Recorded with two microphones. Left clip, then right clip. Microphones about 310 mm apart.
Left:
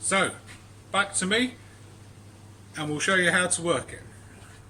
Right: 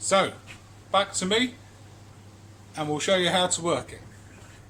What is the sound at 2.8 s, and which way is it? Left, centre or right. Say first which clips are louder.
Speech: even; centre.